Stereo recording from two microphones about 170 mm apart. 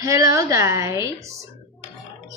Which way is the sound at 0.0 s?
20° right (ahead or behind).